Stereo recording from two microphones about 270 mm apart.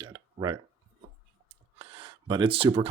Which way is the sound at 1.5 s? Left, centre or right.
Right.